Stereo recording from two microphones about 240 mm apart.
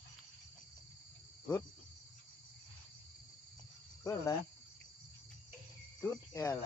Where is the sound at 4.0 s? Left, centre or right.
Centre.